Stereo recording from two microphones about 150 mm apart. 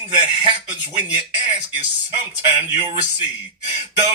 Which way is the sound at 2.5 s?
30° right (ahead or behind).